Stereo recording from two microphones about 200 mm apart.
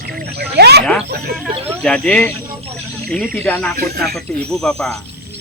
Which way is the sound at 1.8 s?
5° left (ahead or behind).